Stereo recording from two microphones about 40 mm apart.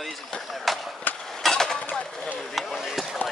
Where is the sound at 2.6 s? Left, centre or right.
Centre.